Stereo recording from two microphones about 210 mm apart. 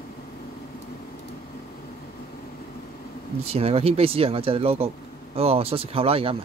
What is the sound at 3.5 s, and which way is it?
Speech, 30° right (ahead or behind).